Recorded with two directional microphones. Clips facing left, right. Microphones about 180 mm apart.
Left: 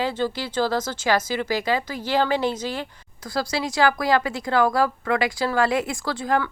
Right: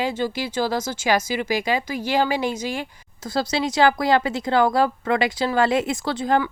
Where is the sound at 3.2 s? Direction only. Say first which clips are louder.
Right 3 dB; 25° right (ahead or behind).